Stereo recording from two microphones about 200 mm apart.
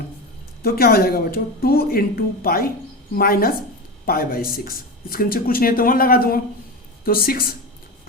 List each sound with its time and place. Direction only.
0.6 s speech: 50° left (ahead or behind)